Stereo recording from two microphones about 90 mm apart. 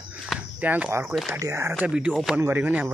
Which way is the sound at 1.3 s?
35° right (ahead or behind).